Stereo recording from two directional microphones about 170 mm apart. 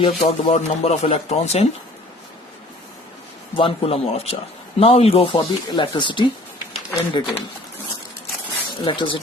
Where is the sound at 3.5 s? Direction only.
30° left (ahead or behind).